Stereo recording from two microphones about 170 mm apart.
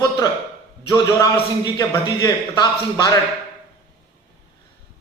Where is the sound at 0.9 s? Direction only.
20° left (ahead or behind).